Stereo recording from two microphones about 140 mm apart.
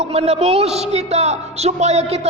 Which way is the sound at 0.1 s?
45° right (ahead or behind).